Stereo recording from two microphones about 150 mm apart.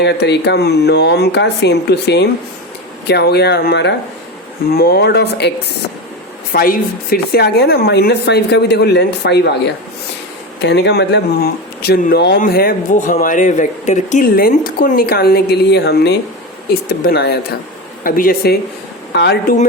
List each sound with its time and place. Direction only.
0.2 s speech: 90° left
10.7 s speech: 90° left
18.0 s speech: 75° left (ahead or behind)
19.1 s speech: 90° left